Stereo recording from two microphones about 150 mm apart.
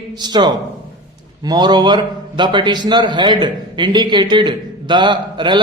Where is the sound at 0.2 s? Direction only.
30° right (ahead or behind).